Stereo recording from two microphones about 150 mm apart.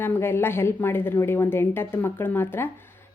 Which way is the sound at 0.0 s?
15° left (ahead or behind).